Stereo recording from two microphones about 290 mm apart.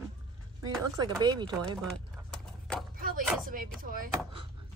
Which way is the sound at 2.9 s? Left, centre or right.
Right.